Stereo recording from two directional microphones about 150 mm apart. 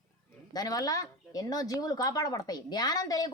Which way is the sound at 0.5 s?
25° left (ahead or behind).